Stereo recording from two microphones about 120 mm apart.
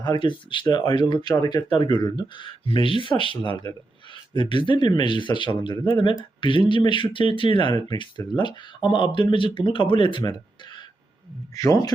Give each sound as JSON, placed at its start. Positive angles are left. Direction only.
{"t": 0.0, "sound": "speech", "side_deg": 40}
{"t": 11.6, "sound": "a man's voice", "side_deg": 25}